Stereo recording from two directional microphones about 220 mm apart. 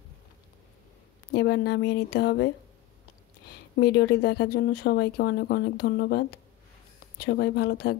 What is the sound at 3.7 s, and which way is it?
Speech, 50° left (ahead or behind).